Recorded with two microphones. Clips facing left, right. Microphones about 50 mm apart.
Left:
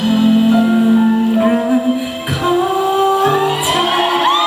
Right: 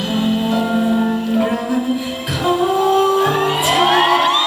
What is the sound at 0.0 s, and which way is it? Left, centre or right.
Music, centre.